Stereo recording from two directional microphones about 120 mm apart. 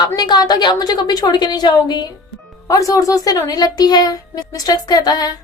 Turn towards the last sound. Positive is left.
turn(degrees=35)  # may be behind; listen again after turning